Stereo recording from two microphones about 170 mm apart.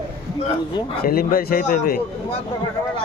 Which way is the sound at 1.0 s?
60° left (ahead or behind).